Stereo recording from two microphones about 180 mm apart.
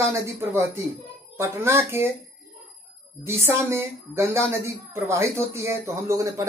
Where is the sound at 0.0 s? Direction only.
15° right (ahead or behind).